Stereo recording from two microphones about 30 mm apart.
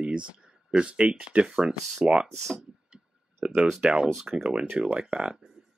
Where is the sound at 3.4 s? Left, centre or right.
Right.